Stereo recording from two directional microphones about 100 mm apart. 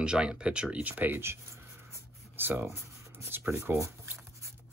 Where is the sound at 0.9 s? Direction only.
20° right (ahead or behind).